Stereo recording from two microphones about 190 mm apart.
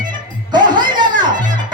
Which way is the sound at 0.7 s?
25° right (ahead or behind).